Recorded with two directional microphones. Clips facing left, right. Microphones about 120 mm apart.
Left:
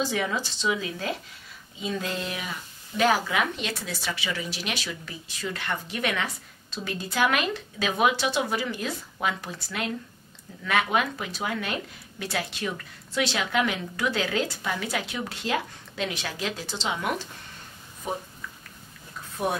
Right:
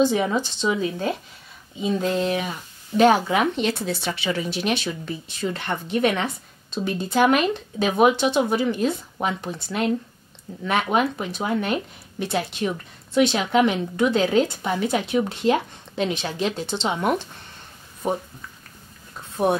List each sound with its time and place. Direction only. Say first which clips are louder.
0.0 s speech: right 8 dB; 25° right (ahead or behind)
18.0 s speech: right 7 dB; 40° right (ahead or behind)